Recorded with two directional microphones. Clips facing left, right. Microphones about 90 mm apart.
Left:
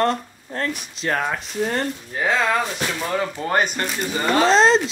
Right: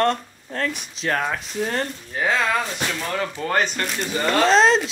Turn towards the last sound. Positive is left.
turn(degrees=0)  # may be behind; listen again after turning